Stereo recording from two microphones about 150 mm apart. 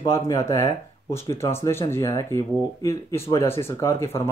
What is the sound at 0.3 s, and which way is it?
Speech, 20° left (ahead or behind).